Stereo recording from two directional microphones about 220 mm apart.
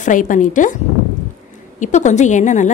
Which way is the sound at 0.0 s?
35° left (ahead or behind).